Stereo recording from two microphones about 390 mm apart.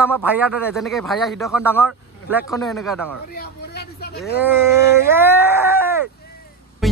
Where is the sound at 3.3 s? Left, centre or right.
Left.